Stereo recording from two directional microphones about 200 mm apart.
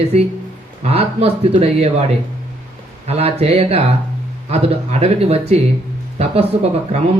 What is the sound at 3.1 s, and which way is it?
Speech, 30° right (ahead or behind).